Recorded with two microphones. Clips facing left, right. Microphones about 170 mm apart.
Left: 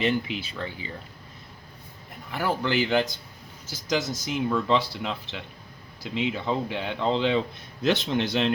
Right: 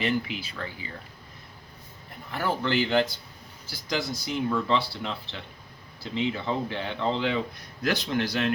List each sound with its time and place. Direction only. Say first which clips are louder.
0.0 s speech: left 2 dB; 25° left (ahead or behind)
2.3 s speech: left 1 dB; 15° left (ahead or behind)